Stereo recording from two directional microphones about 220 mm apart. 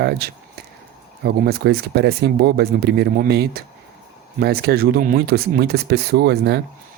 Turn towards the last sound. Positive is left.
turn(degrees=-50)  # may be behind; listen again after turning